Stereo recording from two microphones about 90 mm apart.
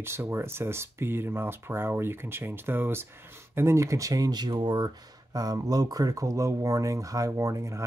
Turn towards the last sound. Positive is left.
turn(degrees=-35)  # may be behind; listen again after turning